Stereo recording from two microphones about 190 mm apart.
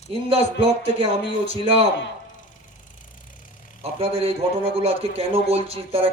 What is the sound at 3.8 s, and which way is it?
A man's voice, 30° right (ahead or behind).